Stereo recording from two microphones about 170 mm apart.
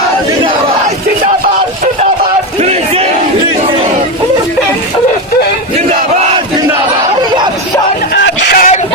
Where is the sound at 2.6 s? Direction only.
40° right (ahead or behind).